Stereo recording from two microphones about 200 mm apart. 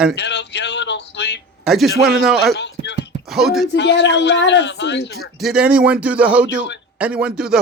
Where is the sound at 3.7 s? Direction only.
60° left (ahead or behind).